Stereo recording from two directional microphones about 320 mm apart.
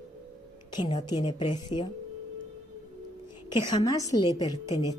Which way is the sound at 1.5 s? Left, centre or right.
Left.